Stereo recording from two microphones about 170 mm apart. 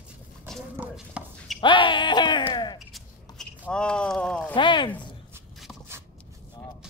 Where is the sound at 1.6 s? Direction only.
30° left (ahead or behind).